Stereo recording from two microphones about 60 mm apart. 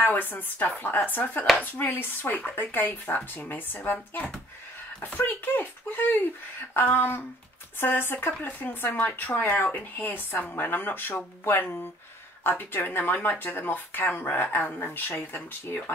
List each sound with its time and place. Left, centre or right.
0.0 s speech: left